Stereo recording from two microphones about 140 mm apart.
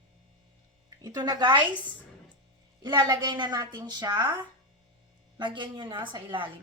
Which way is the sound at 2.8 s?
30° right (ahead or behind).